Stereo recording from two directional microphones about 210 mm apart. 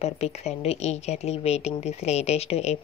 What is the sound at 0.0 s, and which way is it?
Speech, 30° left (ahead or behind).